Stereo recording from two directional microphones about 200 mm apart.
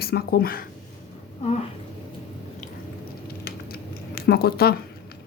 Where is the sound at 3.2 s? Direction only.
50° left (ahead or behind).